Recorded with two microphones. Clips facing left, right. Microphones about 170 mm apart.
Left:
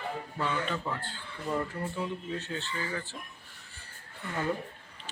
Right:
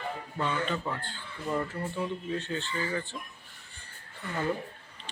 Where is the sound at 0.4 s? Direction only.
5° left (ahead or behind).